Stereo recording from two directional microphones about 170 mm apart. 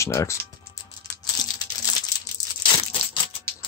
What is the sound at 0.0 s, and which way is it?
Speech, 15° left (ahead or behind).